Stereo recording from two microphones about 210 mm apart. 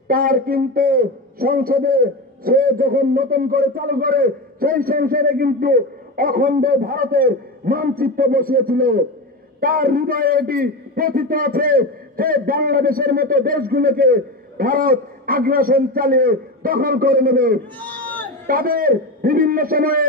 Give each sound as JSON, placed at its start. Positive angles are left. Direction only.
{"t": 0.1, "sound": "a man's voice", "side_deg": -45}
{"t": 17.7, "sound": "a sound", "side_deg": 10}
{"t": 18.5, "sound": "a man's voice", "side_deg": -45}